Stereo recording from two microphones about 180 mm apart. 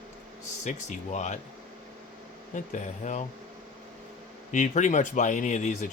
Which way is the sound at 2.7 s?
40° left (ahead or behind).